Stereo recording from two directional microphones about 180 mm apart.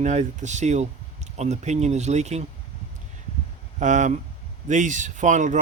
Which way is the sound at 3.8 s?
45° right (ahead or behind).